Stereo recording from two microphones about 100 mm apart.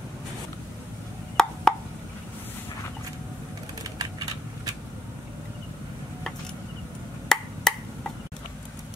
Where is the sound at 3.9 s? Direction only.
35° right (ahead or behind).